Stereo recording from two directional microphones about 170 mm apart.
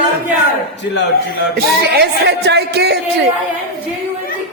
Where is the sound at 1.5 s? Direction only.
70° right (ahead or behind).